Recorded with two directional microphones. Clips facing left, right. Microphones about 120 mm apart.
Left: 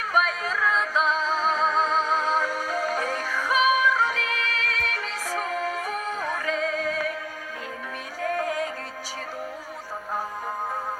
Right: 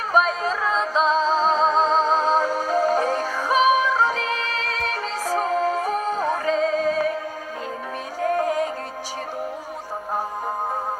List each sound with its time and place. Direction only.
0.1 s music: 30° right (ahead or behind)
8.2 s music: 30° right (ahead or behind)